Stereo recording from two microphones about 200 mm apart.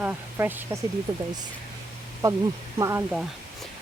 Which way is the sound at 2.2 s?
15° right (ahead or behind).